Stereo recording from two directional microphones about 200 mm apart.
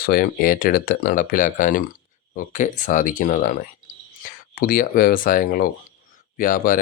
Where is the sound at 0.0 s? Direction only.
50° left (ahead or behind).